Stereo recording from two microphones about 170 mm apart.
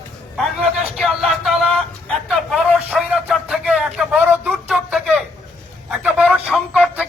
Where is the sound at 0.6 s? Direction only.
Centre (ahead or behind).